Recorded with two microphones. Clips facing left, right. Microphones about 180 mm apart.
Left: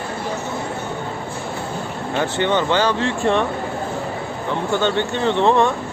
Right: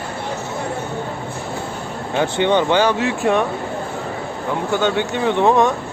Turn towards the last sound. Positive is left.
turn(degrees=-15)  # may be behind; listen again after turning